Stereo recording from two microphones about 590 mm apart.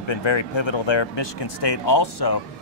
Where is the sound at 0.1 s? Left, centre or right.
Left.